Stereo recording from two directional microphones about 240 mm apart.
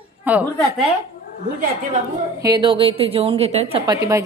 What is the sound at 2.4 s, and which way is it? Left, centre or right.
A woman's voice, centre.